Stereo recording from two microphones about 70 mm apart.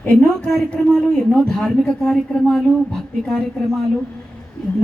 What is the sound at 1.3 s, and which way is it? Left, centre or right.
Speech, centre.